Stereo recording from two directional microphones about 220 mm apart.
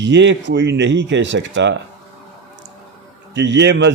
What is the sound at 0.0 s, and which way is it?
Speech, 55° right (ahead or behind).